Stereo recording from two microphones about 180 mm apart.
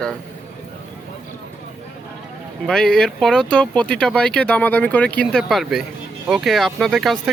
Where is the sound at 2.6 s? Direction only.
Centre (ahead or behind).